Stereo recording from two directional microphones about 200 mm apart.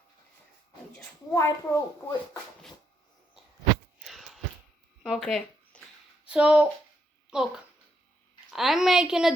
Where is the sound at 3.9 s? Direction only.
Centre (ahead or behind).